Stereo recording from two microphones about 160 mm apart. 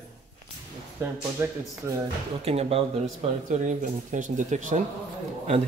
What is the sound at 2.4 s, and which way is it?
Speech, 40° right (ahead or behind).